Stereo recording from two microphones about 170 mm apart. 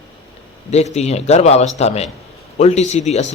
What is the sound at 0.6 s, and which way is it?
A man's voice, 40° left (ahead or behind).